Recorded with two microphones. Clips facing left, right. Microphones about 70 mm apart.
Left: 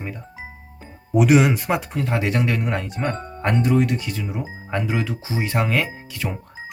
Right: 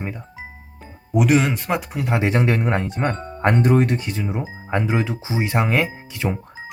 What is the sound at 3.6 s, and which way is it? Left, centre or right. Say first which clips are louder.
Speech: even; right.